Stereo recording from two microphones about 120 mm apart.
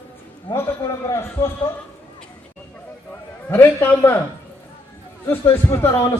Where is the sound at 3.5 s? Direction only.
15° left (ahead or behind).